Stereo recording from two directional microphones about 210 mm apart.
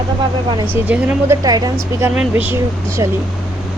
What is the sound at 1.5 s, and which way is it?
Speech, 20° right (ahead or behind).